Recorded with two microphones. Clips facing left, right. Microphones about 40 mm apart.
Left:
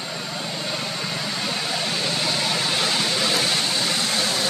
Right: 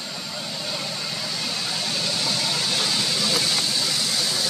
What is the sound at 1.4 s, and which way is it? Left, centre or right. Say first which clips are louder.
Vehicle: left 3 dB; left.